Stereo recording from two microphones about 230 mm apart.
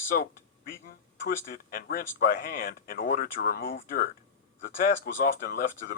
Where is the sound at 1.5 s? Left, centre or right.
Left.